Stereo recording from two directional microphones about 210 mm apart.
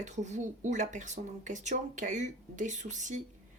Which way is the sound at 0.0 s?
35° right (ahead or behind).